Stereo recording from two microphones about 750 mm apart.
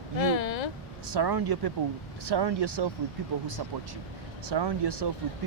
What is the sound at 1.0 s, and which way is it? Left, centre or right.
Speech, right.